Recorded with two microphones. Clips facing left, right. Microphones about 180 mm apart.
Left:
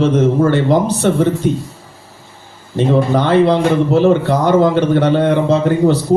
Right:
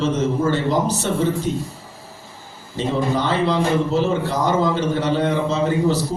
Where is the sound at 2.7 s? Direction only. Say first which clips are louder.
Left 7 dB; 60° left (ahead or behind).